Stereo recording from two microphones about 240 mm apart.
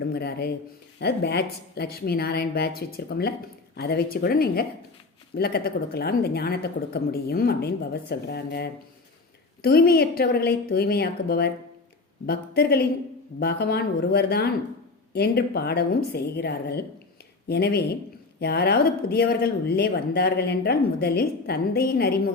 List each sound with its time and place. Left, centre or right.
0.1 s a woman's voice: left